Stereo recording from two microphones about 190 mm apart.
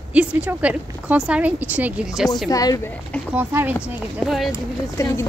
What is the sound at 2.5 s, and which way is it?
Speech, 20° left (ahead or behind).